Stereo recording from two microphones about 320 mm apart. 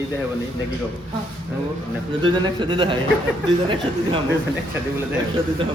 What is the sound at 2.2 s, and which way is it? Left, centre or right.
Speech, centre.